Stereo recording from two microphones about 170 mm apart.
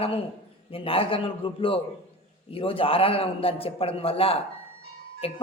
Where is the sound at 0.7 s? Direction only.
35° left (ahead or behind).